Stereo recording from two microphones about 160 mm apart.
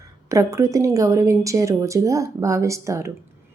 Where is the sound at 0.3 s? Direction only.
20° right (ahead or behind).